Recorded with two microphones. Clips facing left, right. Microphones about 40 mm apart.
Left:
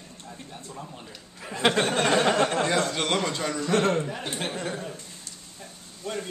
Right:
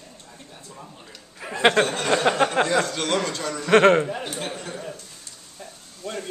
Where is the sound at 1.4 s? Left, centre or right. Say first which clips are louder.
Right 5 dB; centre.